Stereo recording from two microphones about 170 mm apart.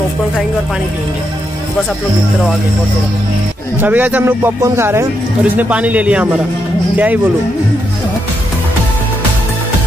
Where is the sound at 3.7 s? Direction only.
10° right (ahead or behind).